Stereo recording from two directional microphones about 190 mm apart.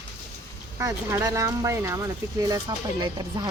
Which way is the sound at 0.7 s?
15° right (ahead or behind).